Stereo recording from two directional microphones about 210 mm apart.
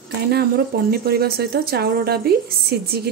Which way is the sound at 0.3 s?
50° right (ahead or behind).